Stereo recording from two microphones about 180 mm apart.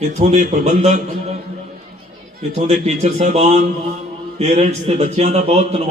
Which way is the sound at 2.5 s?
35° right (ahead or behind).